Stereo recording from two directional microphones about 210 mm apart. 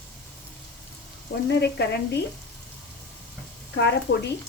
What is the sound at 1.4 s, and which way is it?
Speech, 50° left (ahead or behind).